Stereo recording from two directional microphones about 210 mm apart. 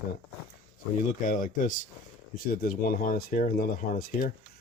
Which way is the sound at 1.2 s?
40° left (ahead or behind).